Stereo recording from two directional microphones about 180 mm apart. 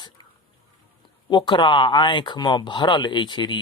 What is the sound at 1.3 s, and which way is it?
Speech, 25° left (ahead or behind).